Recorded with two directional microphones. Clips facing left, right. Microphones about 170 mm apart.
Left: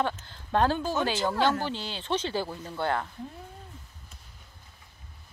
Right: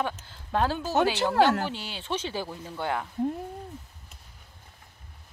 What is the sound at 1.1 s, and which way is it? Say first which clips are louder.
Speech: right 3 dB; 70° right (ahead or behind).